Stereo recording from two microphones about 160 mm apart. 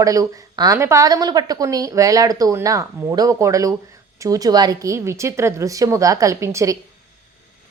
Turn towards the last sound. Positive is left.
turn(degrees=-20)  # may be behind; listen again after turning